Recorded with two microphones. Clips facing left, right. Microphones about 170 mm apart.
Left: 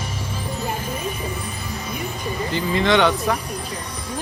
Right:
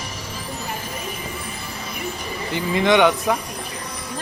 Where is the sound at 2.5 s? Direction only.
20° right (ahead or behind).